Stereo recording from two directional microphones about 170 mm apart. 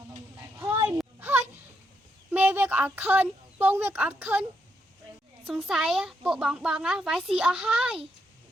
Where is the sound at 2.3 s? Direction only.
10° right (ahead or behind).